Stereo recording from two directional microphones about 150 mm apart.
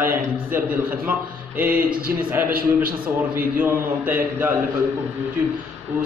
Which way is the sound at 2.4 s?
75° right (ahead or behind).